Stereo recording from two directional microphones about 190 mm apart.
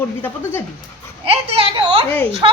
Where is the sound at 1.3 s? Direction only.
30° right (ahead or behind).